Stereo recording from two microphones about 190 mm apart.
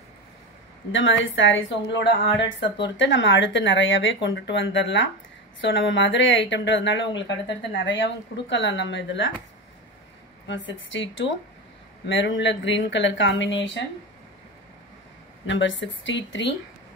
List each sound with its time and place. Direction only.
0.9 s speech: 80° left
10.5 s speech: 75° left (ahead or behind)
15.4 s speech: 75° left (ahead or behind)